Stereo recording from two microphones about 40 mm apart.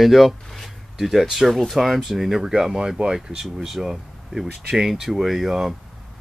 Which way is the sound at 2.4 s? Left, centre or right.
Centre.